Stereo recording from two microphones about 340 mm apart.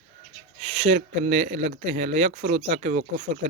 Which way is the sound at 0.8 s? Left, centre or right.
Centre.